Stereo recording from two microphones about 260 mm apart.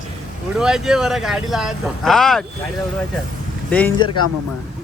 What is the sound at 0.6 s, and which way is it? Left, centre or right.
Speech, centre.